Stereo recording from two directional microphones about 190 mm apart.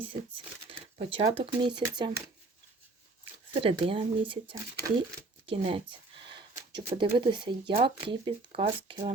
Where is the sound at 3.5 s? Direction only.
30° right (ahead or behind).